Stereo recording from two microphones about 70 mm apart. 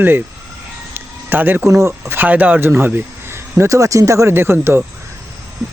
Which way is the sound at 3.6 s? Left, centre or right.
Right.